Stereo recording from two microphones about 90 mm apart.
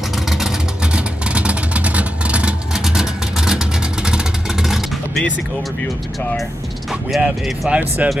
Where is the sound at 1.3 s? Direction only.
15° right (ahead or behind).